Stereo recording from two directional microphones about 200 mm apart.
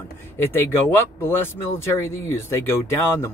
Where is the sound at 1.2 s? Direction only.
10° left (ahead or behind).